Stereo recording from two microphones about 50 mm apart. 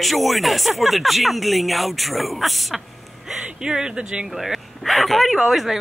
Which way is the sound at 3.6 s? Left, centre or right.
Centre.